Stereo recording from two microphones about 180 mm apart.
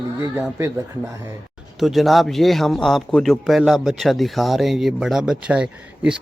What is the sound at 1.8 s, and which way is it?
Speech, centre (ahead or behind).